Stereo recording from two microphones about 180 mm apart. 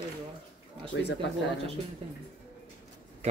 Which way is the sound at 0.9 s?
80° left.